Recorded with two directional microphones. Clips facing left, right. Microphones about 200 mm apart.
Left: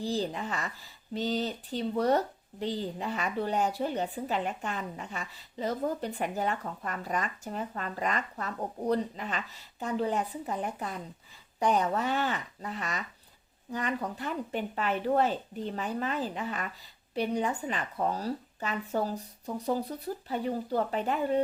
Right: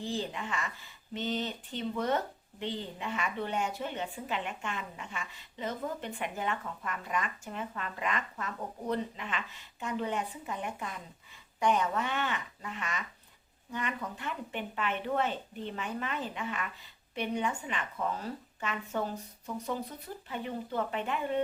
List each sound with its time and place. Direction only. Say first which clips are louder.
0.0 s speech: left 4 dB; 35° left (ahead or behind)